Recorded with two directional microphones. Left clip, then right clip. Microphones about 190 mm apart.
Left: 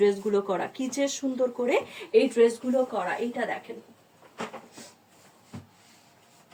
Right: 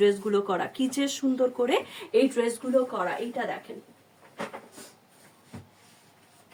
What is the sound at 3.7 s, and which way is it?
Speech, 25° right (ahead or behind).